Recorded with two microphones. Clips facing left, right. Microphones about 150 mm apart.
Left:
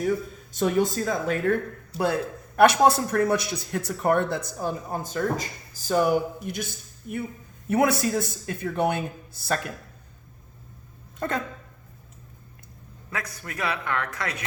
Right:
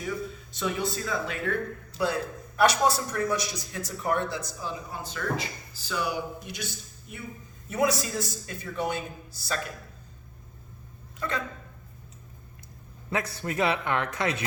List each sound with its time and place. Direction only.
0.0 s a man's voice: 45° left (ahead or behind)
11.2 s a man's voice: 50° left (ahead or behind)
13.1 s a man's voice: 30° right (ahead or behind)